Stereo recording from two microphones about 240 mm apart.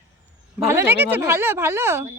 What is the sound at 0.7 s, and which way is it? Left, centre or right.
A woman's voice, centre.